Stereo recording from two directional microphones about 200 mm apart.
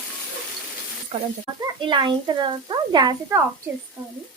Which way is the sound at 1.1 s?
30° right (ahead or behind).